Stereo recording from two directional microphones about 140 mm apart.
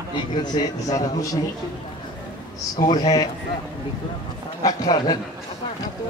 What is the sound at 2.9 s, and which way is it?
Speech, 30° left (ahead or behind).